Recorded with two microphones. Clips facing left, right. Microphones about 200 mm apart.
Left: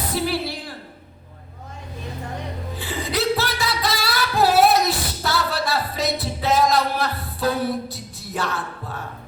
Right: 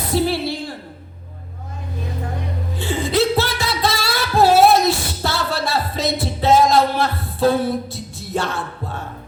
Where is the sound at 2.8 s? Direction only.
25° right (ahead or behind).